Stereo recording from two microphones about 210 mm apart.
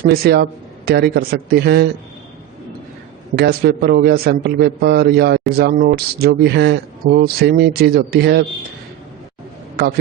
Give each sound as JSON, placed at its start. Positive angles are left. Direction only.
{"t": 0.0, "sound": "a man's voice", "side_deg": -45}
{"t": 3.3, "sound": "a man's voice", "side_deg": -50}